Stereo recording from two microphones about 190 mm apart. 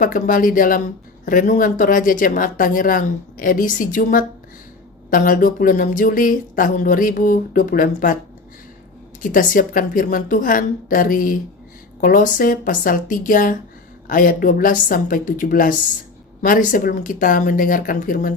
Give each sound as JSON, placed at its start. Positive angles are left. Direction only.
{"t": 0.0, "sound": "speech", "side_deg": 45}
{"t": 9.2, "sound": "speech", "side_deg": 45}